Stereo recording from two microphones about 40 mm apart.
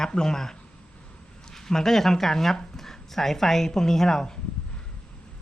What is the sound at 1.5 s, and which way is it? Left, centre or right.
A woman's voice, centre.